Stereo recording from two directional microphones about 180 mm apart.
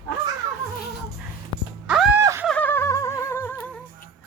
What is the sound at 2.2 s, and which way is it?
Snicker, 15° right (ahead or behind).